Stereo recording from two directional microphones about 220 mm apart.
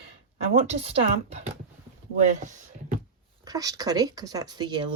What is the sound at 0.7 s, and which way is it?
Speech, 25° right (ahead or behind).